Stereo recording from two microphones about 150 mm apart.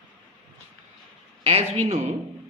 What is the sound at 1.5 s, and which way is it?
Speech, 45° right (ahead or behind).